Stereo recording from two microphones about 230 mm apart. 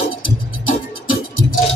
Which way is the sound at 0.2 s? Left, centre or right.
Left.